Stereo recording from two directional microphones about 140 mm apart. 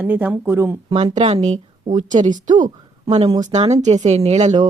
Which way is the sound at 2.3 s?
65° right (ahead or behind).